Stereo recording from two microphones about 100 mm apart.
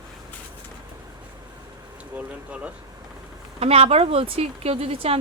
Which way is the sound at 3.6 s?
85° right.